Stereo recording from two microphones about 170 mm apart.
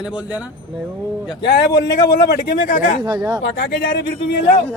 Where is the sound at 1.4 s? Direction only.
90° left.